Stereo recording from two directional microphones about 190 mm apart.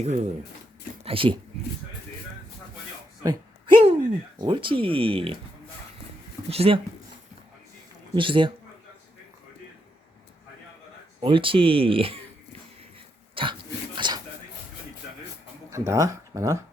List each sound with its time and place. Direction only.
0.0 s speech: 35° right (ahead or behind)
3.2 s a sound: 25° right (ahead or behind)
4.4 s speech: 25° right (ahead or behind)
6.5 s speech: 30° right (ahead or behind)
8.1 s speech: 25° right (ahead or behind)
11.2 s speech: 25° right (ahead or behind)
13.3 s dog: 25° right (ahead or behind)
15.7 s speech: 15° right (ahead or behind)